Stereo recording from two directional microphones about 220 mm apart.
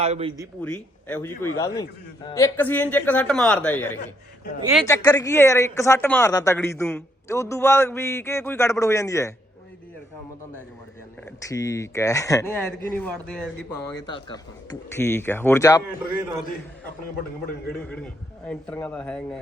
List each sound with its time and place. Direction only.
0.0 s speech: 25° right (ahead or behind)
0.6 s a woman's voice: 5° left (ahead or behind)
11.4 s a woman's voice: 15° left (ahead or behind)
14.1 s a woman's voice: 20° left (ahead or behind)
17.8 s a man's voice: 5° left (ahead or behind)